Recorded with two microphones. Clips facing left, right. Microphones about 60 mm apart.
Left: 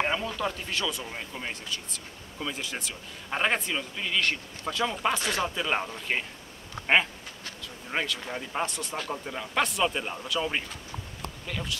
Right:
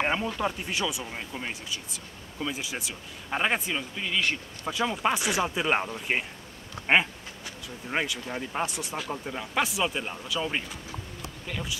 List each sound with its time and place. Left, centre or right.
0.0 s speech: centre